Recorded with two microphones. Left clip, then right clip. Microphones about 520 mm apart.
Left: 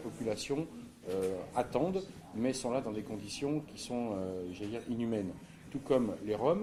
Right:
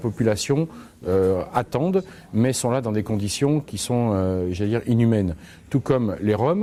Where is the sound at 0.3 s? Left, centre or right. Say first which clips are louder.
Right 13 dB; right.